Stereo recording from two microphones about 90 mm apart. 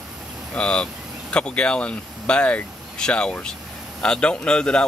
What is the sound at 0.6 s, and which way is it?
Speech, 10° left (ahead or behind).